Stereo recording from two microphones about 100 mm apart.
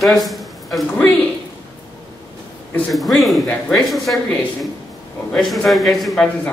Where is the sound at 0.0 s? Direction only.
Centre (ahead or behind).